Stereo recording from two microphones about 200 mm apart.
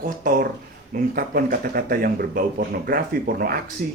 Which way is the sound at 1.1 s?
45° right (ahead or behind).